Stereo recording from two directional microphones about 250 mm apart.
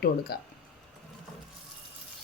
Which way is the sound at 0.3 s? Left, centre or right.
Left.